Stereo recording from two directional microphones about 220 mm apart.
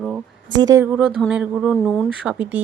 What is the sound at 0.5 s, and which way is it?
A woman's voice, 15° right (ahead or behind).